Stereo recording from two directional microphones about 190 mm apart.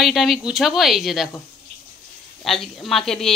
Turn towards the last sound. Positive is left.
turn(degrees=0)  # may be behind; listen again after turning